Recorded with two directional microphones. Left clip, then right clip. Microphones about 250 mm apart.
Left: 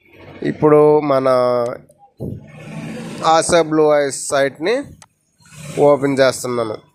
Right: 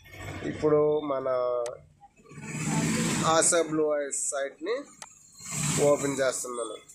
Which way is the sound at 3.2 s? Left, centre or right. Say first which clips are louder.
Left 12 dB; left.